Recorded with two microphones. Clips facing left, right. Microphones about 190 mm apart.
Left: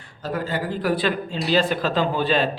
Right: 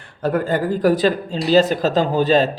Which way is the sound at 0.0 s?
55° right (ahead or behind).